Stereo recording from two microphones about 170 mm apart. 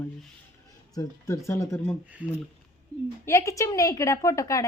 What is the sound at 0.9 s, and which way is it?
Speech, 20° left (ahead or behind).